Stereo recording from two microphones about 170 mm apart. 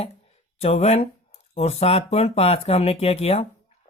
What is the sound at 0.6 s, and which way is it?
Speech, 35° left (ahead or behind).